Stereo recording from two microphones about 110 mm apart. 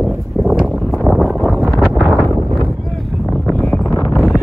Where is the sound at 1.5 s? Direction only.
Centre (ahead or behind).